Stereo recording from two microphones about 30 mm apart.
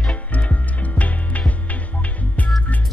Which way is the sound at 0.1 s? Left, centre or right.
Left.